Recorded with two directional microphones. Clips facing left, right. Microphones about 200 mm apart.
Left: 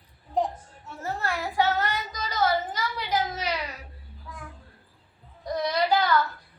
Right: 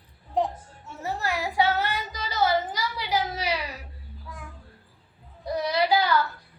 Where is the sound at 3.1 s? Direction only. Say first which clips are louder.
Right 1 dB; 10° right (ahead or behind).